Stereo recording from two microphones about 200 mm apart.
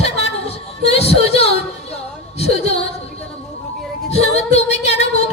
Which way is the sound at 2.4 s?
30° left (ahead or behind).